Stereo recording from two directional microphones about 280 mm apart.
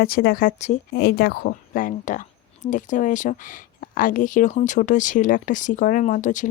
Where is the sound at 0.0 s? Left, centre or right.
Left.